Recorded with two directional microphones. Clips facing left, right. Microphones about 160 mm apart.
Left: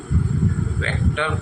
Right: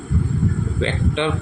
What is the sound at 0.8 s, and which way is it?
Speech, 25° right (ahead or behind).